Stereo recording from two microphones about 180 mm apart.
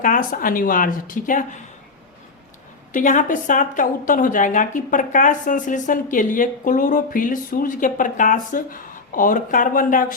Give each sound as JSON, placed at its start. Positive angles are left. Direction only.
{"t": 0.0, "sound": "a woman's voice", "side_deg": 50}
{"t": 2.9, "sound": "a woman's voice", "side_deg": 45}